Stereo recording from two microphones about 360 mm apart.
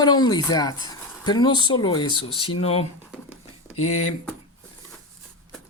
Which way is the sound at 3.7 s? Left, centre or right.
Left.